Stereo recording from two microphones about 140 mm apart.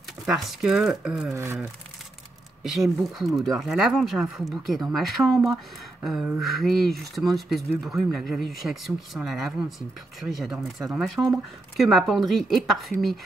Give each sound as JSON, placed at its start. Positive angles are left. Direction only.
{"t": 0.3, "sound": "speech", "side_deg": -5}
{"t": 1.3, "sound": "speech", "side_deg": -20}
{"t": 2.6, "sound": "speech", "side_deg": 0}
{"t": 11.2, "sound": "speech", "side_deg": -15}
{"t": 11.7, "sound": "speech", "side_deg": 0}